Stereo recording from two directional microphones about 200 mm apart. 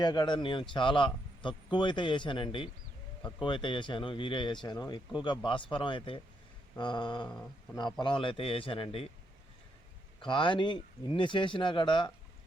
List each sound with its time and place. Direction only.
0.0 s a man's voice: 20° left (ahead or behind)
7.3 s speech: 5° left (ahead or behind)
7.8 s a man's voice: 20° left (ahead or behind)
10.2 s a man's voice: 25° left (ahead or behind)